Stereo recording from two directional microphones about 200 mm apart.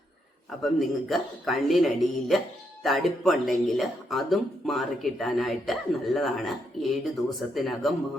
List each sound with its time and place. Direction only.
0.6 s speech: centre (ahead or behind)